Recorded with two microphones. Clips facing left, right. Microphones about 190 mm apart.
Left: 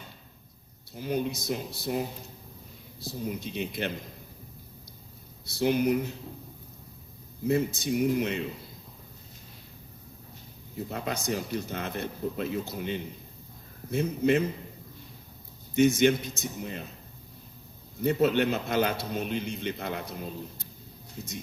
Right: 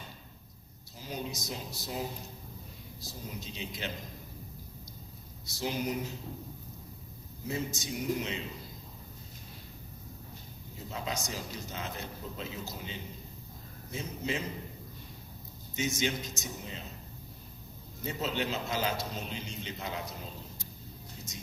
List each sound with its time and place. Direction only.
0.9 s speech: 60° left (ahead or behind)
3.0 s speech: 60° left (ahead or behind)
5.5 s speech: 60° left (ahead or behind)
7.4 s speech: 60° left (ahead or behind)
10.9 s speech: 60° left (ahead or behind)
15.7 s speech: 60° left (ahead or behind)
18.0 s speech: 60° left (ahead or behind)